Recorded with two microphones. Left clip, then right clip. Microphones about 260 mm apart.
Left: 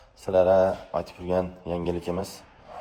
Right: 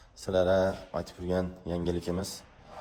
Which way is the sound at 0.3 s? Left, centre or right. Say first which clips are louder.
Left 6 dB; left.